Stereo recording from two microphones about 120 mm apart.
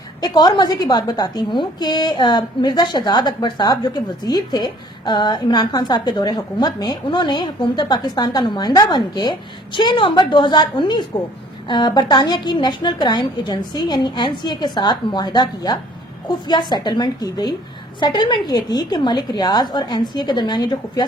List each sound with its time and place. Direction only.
0.2 s a woman's voice: 35° left (ahead or behind)